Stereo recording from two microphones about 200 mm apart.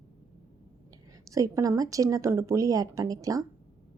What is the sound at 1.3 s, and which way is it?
A woman's voice, 15° right (ahead or behind).